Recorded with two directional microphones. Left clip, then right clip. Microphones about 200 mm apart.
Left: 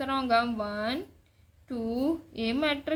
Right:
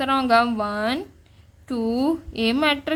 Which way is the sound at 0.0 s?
35° right (ahead or behind).